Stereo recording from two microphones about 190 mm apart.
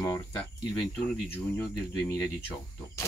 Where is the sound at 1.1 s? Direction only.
10° left (ahead or behind).